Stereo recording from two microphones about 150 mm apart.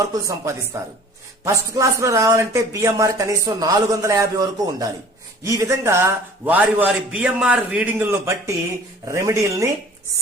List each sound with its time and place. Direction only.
0.0 s a man's voice: 20° right (ahead or behind)